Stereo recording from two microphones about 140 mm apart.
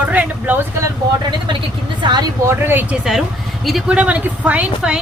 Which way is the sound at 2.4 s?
15° right (ahead or behind).